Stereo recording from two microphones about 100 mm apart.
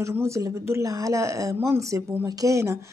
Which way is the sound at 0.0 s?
30° right (ahead or behind).